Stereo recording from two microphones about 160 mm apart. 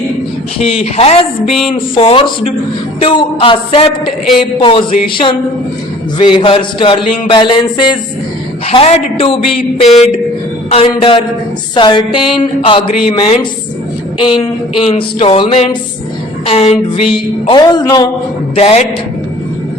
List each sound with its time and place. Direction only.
0.6 s a man's voice: 40° left (ahead or behind)
8.6 s speech: 40° left (ahead or behind)
9.6 s music: centre (ahead or behind)
11.7 s a man's voice: 30° left (ahead or behind)
18.5 s speech: 40° left (ahead or behind)